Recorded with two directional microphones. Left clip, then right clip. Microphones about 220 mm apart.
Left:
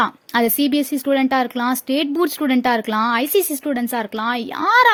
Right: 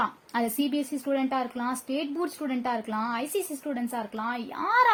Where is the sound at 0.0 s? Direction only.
40° left (ahead or behind).